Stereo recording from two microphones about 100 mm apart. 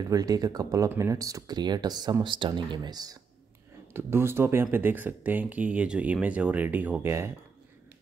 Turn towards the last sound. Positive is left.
turn(degrees=-25)  # may be behind; listen again after turning